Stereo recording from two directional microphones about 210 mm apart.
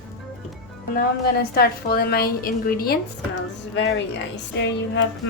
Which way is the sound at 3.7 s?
55° left (ahead or behind).